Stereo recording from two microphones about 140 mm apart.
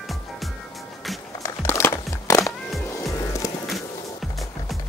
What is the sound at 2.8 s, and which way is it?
Skateboard, 20° left (ahead or behind).